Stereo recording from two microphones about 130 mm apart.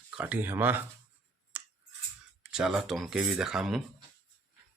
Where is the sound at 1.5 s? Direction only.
10° right (ahead or behind).